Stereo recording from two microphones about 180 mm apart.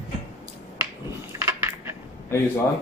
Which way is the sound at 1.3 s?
20° right (ahead or behind).